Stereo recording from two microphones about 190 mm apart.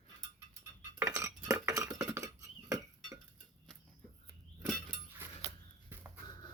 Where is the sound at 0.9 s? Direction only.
15° right (ahead or behind).